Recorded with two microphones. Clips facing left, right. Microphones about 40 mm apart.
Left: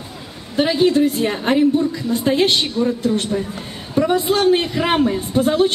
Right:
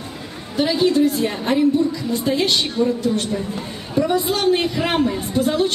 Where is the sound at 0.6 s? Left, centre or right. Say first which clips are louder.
Left 2 dB; left.